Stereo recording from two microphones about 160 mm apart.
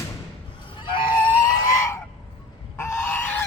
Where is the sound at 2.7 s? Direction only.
15° left (ahead or behind).